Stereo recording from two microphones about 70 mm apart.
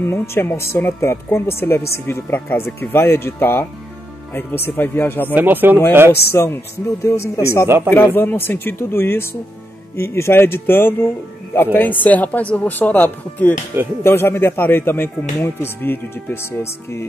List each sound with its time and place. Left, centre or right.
0.0 s speech: left
5.3 s speech: right
6.3 s speech: left
7.6 s speech: right
7.9 s speech: left
14.0 s speech: left